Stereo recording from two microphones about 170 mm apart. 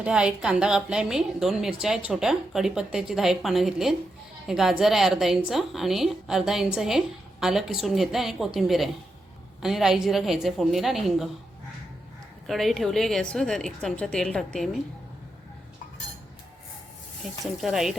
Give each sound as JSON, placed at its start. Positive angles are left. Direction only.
{"t": 0.0, "sound": "a woman's voice", "side_deg": -5}
{"t": 12.5, "sound": "a woman's voice", "side_deg": 0}
{"t": 17.4, "sound": "a woman's voice", "side_deg": 0}